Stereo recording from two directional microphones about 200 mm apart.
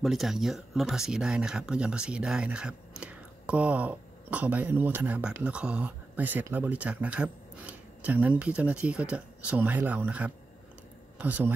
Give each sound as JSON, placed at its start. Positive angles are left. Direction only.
{"t": 0.0, "sound": "speech", "side_deg": 0}